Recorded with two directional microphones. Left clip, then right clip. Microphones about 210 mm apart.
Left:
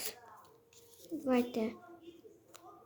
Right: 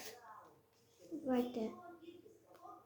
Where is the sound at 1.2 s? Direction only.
35° left (ahead or behind).